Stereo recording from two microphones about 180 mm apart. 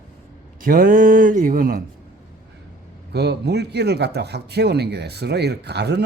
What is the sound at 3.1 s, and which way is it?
A man's voice, 65° right (ahead or behind).